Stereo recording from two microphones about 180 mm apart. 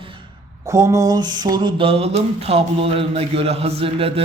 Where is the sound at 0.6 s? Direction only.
20° right (ahead or behind).